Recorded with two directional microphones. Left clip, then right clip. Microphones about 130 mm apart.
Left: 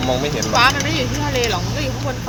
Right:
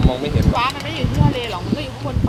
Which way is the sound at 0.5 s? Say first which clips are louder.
Left 8 dB; 30° right (ahead or behind).